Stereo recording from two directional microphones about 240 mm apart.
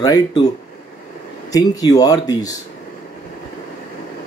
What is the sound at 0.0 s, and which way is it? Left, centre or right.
Speech, centre.